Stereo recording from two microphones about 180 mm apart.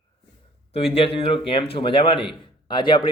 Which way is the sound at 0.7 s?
35° left (ahead or behind).